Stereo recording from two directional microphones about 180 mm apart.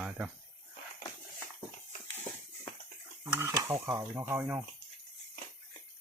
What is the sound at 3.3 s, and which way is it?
Speech, 15° right (ahead or behind).